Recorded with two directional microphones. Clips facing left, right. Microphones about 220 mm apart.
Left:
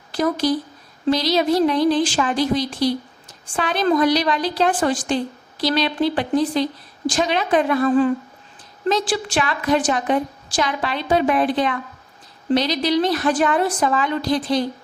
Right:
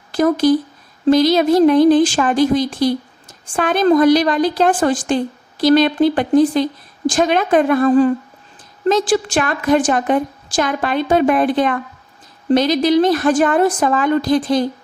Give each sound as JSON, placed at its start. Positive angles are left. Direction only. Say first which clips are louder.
{"t": 0.1, "sound": "a woman's voice", "louder": "right 6 dB", "side_deg": -50}